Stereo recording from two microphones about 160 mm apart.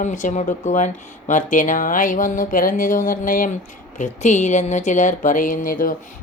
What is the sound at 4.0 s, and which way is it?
Speech, 45° left (ahead or behind).